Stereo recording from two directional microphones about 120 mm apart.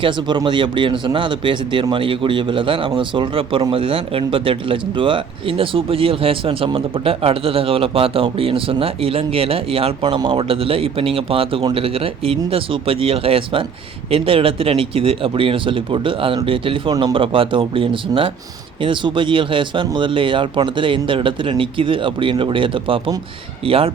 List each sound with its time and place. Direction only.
0.0 s speech: 40° right (ahead or behind)